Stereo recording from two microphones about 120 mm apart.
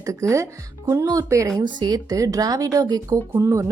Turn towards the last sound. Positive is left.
turn(degrees=-25)  # may be behind; listen again after turning